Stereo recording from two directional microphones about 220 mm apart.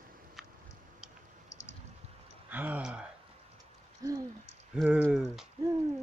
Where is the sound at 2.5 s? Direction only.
5° right (ahead or behind).